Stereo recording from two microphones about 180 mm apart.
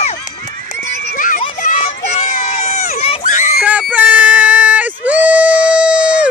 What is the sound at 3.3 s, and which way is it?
Screaming, 45° left (ahead or behind).